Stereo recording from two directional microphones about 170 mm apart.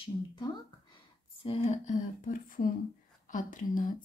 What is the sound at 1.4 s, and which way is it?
A woman's voice, 40° left (ahead or behind).